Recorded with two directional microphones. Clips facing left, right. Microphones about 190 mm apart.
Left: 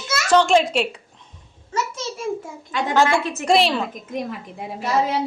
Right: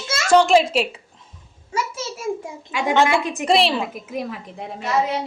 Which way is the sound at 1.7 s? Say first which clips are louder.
Even; 10° right (ahead or behind).